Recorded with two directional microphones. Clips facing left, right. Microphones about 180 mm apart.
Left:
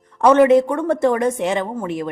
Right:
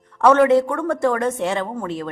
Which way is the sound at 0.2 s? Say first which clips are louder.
Left 2 dB; 20° left (ahead or behind).